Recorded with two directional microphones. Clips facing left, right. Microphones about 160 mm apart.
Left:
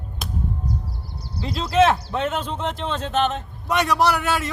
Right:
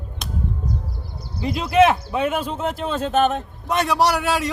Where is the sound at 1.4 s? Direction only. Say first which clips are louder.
Right 2 dB; 15° right (ahead or behind).